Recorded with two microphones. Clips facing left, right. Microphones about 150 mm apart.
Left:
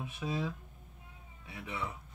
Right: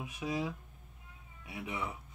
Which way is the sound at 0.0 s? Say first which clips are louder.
Even; 15° right (ahead or behind).